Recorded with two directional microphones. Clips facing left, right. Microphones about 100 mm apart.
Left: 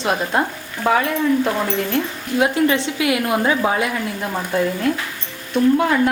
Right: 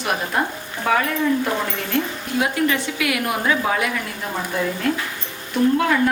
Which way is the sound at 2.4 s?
25° left (ahead or behind).